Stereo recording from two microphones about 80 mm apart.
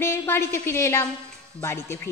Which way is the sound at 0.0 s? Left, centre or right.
Left.